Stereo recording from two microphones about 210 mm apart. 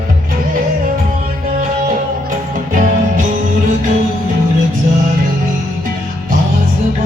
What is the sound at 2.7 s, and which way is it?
Music, 40° right (ahead or behind).